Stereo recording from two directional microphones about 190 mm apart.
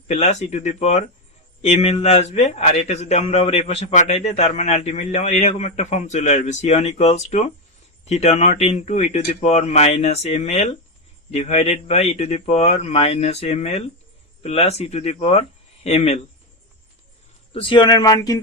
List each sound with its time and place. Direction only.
0.1 s a man's voice: 35° left (ahead or behind)
17.5 s speech: 25° left (ahead or behind)